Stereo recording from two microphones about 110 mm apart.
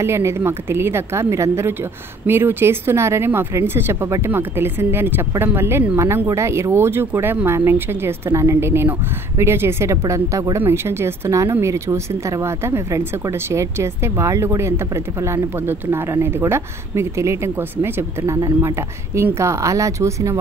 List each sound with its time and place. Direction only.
0.0 s speech: 25° right (ahead or behind)
18.3 s speech: 30° right (ahead or behind)